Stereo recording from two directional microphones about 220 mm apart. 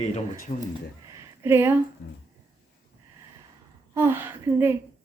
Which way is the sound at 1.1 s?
10° right (ahead or behind).